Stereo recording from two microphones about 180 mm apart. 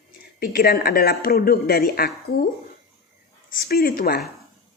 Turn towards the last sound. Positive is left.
turn(degrees=55)  # may be behind; listen again after turning